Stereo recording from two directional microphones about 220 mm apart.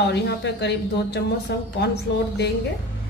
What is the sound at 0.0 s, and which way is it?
Speech, 50° left (ahead or behind).